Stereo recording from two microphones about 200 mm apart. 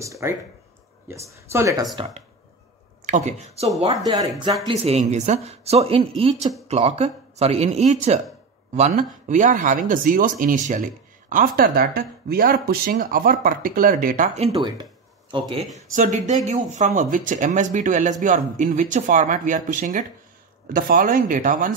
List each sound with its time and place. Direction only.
0.0 s speech: 15° right (ahead or behind)
2.0 s speech: 35° right (ahead or behind)
14.5 s speech: 20° right (ahead or behind)
15.9 s speech: 40° right (ahead or behind)